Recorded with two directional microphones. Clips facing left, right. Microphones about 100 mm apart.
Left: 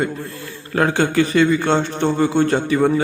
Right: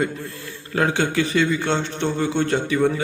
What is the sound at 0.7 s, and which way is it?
A man's voice, 50° left (ahead or behind).